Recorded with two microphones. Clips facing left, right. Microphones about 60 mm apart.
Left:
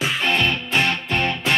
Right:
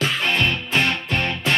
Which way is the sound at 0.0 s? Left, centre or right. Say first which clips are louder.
Even; centre.